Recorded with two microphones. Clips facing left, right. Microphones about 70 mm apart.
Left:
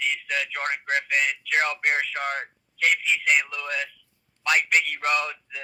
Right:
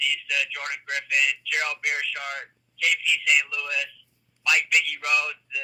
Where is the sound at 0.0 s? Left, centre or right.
Left.